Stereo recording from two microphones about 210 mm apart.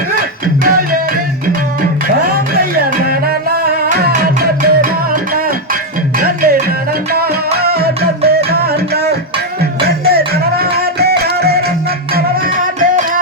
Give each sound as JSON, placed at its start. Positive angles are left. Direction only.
{"t": 0.6, "sound": "music", "side_deg": -40}